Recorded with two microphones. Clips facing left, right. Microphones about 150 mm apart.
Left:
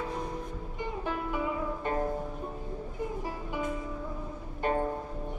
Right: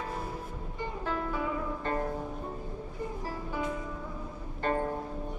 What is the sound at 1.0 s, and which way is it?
Music, 15° left (ahead or behind).